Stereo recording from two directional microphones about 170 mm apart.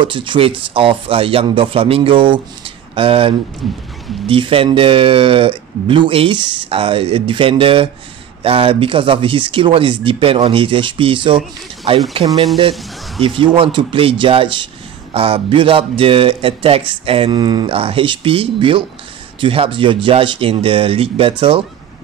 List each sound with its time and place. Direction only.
0.0 s speech: 30° right (ahead or behind)
13.2 s speech: 30° right (ahead or behind)